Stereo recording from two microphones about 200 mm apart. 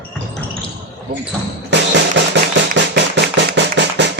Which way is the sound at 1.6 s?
60° right (ahead or behind).